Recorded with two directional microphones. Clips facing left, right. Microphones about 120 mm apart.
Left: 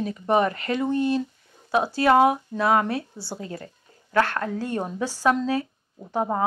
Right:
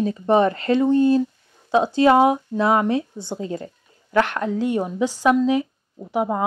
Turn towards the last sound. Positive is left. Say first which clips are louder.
# right 3 dB
turn(degrees=-10)  # may be behind; listen again after turning